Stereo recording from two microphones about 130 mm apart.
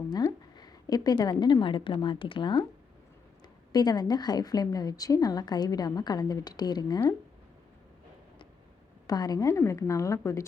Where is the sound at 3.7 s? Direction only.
30° left (ahead or behind).